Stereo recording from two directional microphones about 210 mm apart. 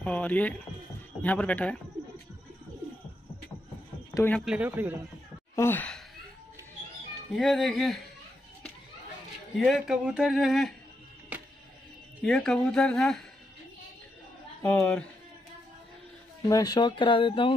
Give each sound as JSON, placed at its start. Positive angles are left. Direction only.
{"t": 0.0, "sound": "speech", "side_deg": 5}
{"t": 4.1, "sound": "speech", "side_deg": 10}
{"t": 4.5, "sound": "a man's voice", "side_deg": -5}
{"t": 5.6, "sound": "sigh", "side_deg": 10}
{"t": 7.3, "sound": "speech", "side_deg": 0}
{"t": 9.6, "sound": "speech", "side_deg": 0}
{"t": 11.3, "sound": "music", "side_deg": -10}
{"t": 12.2, "sound": "speech", "side_deg": 5}
{"t": 14.6, "sound": "speech", "side_deg": 5}
{"t": 16.4, "sound": "speech", "side_deg": 20}